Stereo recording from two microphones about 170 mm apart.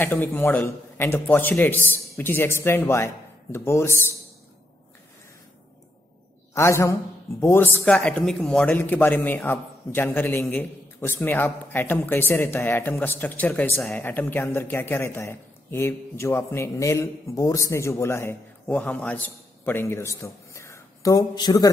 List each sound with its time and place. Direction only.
0.0 s a woman's voice: 10° left (ahead or behind)
6.5 s a woman's voice: 15° left (ahead or behind)